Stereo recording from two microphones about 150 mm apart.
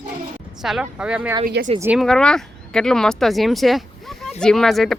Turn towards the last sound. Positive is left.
turn(degrees=0)  # may be behind; listen again after turning